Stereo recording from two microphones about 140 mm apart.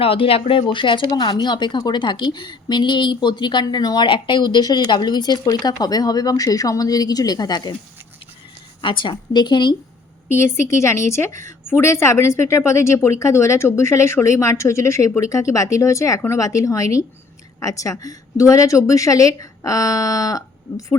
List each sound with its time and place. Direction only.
0.0 s speech: 40° left (ahead or behind)
8.8 s speech: 35° left (ahead or behind)
10.3 s a woman's voice: 20° left (ahead or behind)